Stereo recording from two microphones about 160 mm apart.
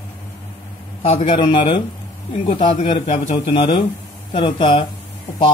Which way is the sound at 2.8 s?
45° left (ahead or behind).